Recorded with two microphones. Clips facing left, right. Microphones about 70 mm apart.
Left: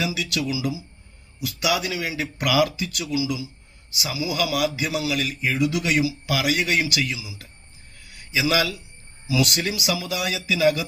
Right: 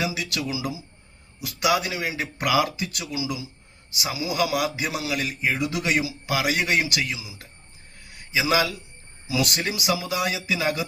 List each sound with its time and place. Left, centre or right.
0.0 s speech: right
3.1 s speech: right
8.4 s speech: right